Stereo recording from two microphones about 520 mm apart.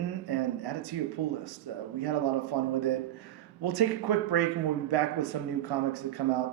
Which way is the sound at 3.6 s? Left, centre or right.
Right.